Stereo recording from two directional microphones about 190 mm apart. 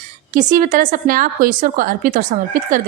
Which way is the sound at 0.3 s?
45° right (ahead or behind).